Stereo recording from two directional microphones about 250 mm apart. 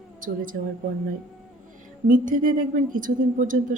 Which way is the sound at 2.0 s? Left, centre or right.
Right.